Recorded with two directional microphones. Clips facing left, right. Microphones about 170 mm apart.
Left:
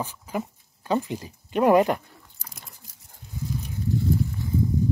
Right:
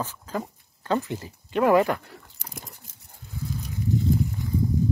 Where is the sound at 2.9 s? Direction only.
25° right (ahead or behind).